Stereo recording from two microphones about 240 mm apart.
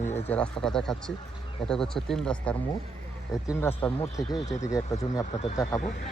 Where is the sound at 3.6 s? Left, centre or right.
Centre.